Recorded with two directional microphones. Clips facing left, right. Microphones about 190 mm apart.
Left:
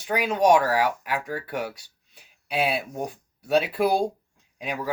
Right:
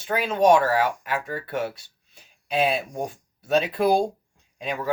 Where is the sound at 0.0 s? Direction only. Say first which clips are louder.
Right 1 dB; 15° left (ahead or behind).